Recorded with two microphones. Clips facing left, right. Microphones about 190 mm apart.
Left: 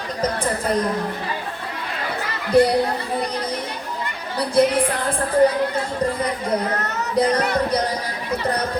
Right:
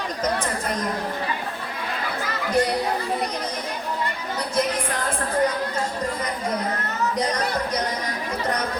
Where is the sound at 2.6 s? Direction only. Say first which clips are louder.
Left 7 dB; 35° left (ahead or behind).